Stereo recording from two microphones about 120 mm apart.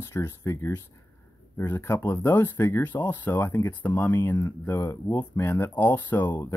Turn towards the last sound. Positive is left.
turn(degrees=15)  # may be behind; listen again after turning